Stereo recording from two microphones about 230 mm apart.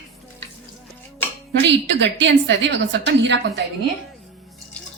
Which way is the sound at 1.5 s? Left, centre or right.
Right.